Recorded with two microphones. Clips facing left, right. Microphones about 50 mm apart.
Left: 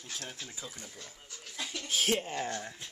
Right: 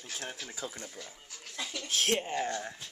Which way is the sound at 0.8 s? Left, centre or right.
Centre.